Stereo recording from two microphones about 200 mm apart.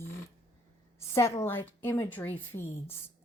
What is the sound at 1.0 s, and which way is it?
A woman's voice, 15° left (ahead or behind).